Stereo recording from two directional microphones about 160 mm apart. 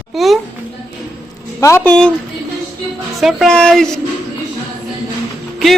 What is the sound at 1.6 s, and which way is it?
Speech, 15° left (ahead or behind).